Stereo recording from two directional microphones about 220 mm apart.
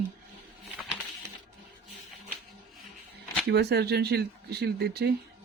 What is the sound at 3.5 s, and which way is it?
Speech, 50° right (ahead or behind).